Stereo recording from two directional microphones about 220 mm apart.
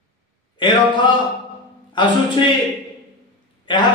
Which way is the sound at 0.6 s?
20° left (ahead or behind).